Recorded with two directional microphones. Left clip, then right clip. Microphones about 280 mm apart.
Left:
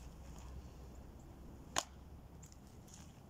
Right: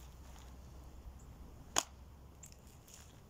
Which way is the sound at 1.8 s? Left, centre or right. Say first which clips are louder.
Right 3 dB; centre.